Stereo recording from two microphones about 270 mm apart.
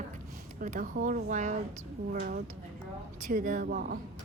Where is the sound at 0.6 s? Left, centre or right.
Right.